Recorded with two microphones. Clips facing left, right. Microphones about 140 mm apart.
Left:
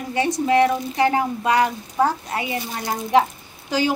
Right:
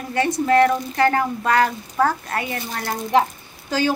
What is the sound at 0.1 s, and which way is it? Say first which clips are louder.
A woman's voice: right 1 dB; 15° left (ahead or behind).